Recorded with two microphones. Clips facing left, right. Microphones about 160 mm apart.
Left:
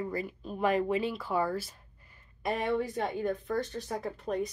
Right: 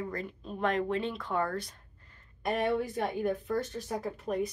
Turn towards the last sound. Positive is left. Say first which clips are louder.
# even
turn(degrees=0)  # may be behind; listen again after turning